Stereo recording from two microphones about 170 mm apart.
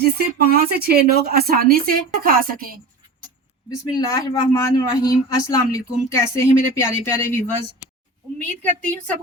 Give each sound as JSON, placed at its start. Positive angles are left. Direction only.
{"t": 0.0, "sound": "speech", "side_deg": -65}
{"t": 4.1, "sound": "speech", "side_deg": 20}